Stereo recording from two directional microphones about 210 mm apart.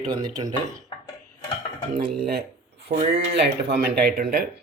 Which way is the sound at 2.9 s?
30° right (ahead or behind).